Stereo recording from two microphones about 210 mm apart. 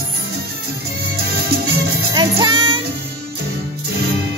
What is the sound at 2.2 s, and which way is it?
Music, 20° right (ahead or behind).